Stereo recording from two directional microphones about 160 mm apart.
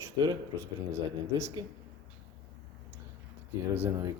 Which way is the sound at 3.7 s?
15° right (ahead or behind).